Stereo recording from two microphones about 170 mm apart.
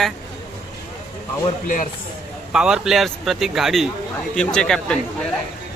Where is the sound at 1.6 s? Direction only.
55° left (ahead or behind).